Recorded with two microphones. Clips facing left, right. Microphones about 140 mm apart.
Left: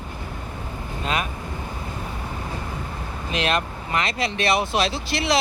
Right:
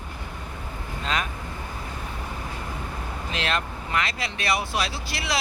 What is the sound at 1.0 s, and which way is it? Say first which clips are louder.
Speech: left 2 dB; 10° left (ahead or behind).